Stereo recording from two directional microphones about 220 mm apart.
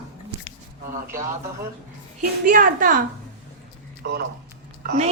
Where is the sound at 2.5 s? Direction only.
40° right (ahead or behind).